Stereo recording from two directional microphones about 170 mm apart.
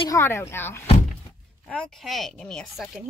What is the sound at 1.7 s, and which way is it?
Speech, 5° left (ahead or behind).